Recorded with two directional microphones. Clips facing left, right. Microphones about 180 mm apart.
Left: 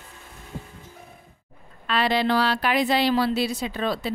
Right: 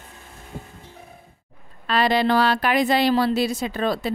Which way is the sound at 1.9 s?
40° right (ahead or behind).